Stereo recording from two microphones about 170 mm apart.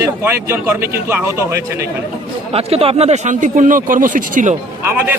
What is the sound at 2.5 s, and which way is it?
Speech, 35° right (ahead or behind).